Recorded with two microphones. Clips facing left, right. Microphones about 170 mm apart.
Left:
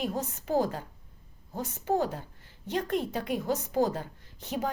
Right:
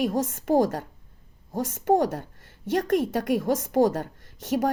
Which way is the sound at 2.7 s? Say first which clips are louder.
Right 7 dB; 45° right (ahead or behind).